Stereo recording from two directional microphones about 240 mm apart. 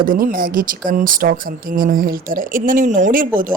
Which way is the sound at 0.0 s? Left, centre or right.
Right.